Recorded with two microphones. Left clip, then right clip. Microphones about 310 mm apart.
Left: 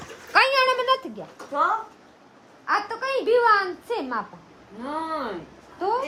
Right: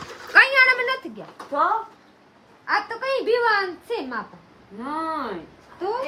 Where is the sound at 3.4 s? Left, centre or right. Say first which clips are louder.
Left 1 dB; centre.